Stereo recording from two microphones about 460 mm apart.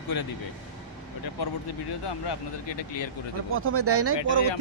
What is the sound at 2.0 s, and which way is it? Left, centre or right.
Speech, left.